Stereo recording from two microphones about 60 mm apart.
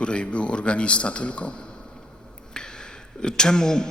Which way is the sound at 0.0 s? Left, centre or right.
Centre.